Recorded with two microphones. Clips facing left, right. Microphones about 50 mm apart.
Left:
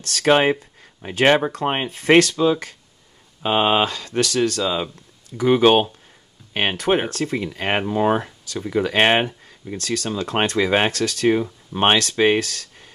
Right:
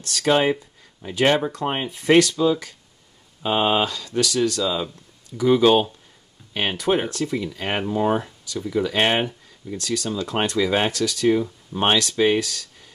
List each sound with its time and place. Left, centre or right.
0.2 s speech: left
7.1 s speech: left
9.8 s speech: left